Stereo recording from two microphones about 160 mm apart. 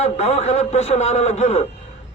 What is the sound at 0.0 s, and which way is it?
A man's voice, 45° left (ahead or behind).